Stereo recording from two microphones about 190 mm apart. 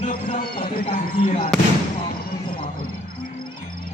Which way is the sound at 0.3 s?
50° left (ahead or behind).